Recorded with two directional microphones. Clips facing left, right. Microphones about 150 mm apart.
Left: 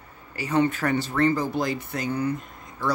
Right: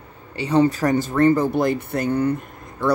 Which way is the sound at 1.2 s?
55° right (ahead or behind).